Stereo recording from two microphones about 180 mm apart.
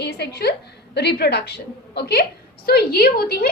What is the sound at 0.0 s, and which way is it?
A woman's voice, 65° left (ahead or behind).